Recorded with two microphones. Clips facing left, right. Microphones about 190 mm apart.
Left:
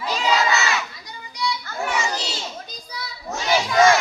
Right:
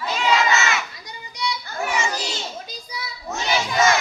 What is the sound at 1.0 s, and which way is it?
Children playing, 20° right (ahead or behind).